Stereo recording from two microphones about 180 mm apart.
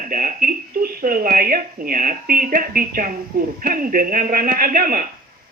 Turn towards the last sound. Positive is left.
turn(degrees=-55)  # may be behind; listen again after turning